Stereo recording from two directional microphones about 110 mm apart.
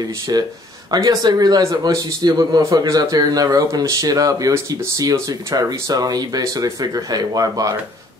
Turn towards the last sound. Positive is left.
turn(degrees=-35)  # may be behind; listen again after turning